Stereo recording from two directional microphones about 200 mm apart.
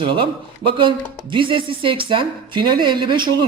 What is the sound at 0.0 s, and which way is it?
A man's voice, 25° right (ahead or behind).